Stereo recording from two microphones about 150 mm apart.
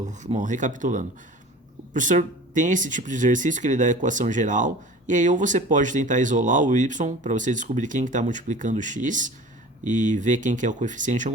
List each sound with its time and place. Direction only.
0.3 s speech: 55° right (ahead or behind)